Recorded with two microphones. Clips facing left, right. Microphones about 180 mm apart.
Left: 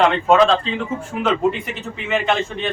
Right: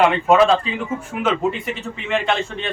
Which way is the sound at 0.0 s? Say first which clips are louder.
Even; 5° right (ahead or behind).